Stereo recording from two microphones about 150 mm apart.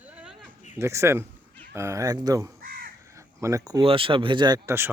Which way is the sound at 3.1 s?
20° right (ahead or behind).